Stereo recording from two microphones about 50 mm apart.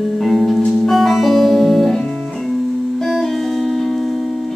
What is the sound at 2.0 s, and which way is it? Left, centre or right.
Music, left.